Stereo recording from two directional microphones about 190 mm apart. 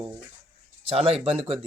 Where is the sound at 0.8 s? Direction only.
30° right (ahead or behind).